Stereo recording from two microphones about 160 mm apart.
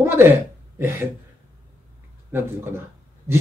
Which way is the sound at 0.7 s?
15° right (ahead or behind).